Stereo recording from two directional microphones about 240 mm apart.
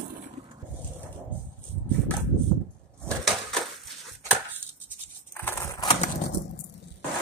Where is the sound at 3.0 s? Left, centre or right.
Centre.